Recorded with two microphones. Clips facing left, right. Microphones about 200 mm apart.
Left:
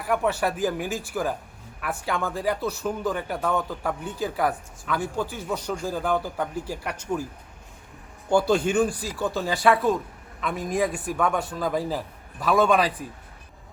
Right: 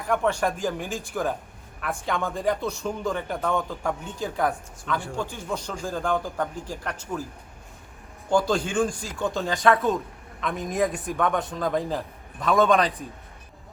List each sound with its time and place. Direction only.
0.0 s speech: 5° left (ahead or behind)
8.3 s speech: 10° left (ahead or behind)